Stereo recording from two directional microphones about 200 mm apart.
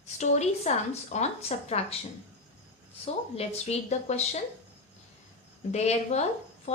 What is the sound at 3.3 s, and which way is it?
Speech, 30° left (ahead or behind).